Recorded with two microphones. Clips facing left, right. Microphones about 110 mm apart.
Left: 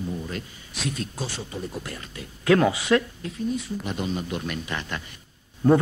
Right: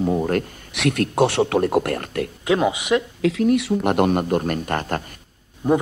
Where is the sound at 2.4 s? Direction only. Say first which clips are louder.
Left 1 dB; 20° right (ahead or behind).